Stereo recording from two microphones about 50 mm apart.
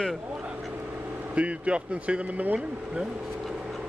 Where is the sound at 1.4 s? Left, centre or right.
Right.